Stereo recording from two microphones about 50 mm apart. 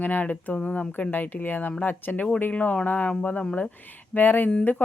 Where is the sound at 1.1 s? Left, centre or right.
Left.